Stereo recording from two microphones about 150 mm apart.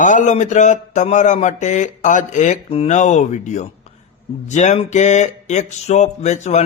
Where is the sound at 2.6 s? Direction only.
40° left (ahead or behind).